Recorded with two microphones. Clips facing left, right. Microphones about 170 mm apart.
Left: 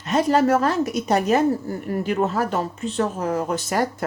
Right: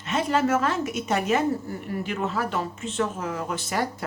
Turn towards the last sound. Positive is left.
turn(degrees=45)  # may be behind; listen again after turning